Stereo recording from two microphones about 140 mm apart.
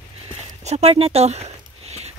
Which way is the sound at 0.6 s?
50° right (ahead or behind).